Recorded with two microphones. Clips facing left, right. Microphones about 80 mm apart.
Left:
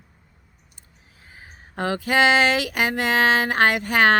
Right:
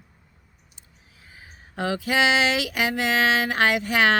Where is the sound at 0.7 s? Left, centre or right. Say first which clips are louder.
Left 1 dB; left.